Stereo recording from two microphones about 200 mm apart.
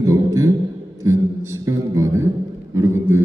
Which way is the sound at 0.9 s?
15° right (ahead or behind).